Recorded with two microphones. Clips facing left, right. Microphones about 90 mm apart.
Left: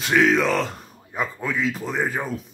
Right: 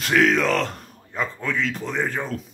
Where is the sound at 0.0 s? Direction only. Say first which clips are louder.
Even; centre (ahead or behind).